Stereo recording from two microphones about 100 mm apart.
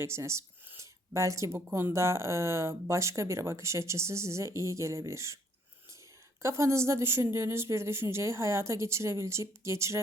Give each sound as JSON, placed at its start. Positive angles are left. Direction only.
{"t": 0.0, "sound": "speech", "side_deg": -30}
{"t": 6.4, "sound": "speech", "side_deg": -30}